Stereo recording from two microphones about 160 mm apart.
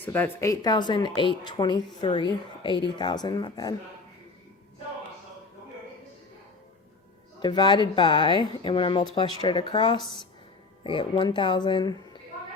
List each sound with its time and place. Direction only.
0.0 s speech: 10° left (ahead or behind)
7.3 s speech: 30° left (ahead or behind)